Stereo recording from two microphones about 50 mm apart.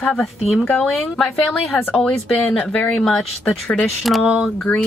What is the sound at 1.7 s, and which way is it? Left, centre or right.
Speech, centre.